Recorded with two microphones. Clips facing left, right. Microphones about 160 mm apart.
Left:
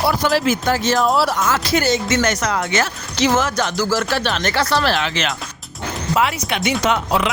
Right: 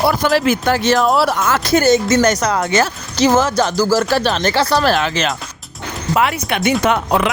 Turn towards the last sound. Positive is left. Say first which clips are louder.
# right 3 dB
turn(degrees=-50)  # may be behind; listen again after turning